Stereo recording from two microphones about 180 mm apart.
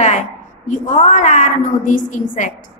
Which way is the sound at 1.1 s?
45° left (ahead or behind).